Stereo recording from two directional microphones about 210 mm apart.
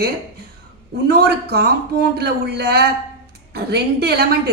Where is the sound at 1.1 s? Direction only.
50° right (ahead or behind).